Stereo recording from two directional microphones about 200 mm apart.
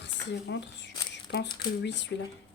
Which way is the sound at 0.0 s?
60° left (ahead or behind).